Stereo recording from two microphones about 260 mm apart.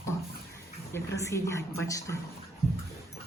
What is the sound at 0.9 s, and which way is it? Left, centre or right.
A woman's voice, centre.